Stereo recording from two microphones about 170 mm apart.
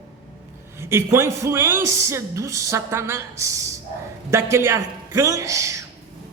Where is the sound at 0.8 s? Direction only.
15° right (ahead or behind).